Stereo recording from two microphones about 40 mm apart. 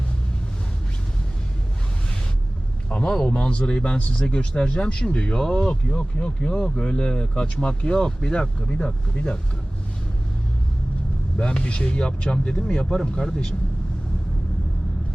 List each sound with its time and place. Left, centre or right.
2.9 s speech: centre
11.3 s speech: left